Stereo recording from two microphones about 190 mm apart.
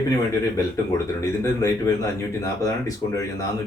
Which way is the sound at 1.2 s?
15° left (ahead or behind).